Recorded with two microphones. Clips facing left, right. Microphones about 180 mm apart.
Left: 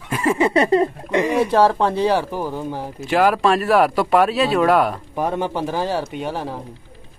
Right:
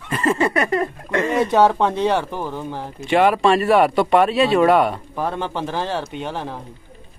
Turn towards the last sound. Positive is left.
turn(degrees=10)  # may be behind; listen again after turning